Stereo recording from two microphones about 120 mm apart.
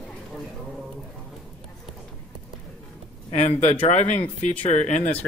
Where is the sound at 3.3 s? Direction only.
60° left (ahead or behind).